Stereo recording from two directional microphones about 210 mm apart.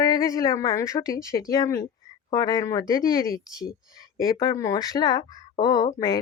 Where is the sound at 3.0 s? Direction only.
45° left (ahead or behind).